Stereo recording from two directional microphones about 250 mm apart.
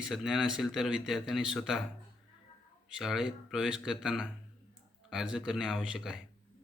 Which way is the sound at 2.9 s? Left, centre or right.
Centre.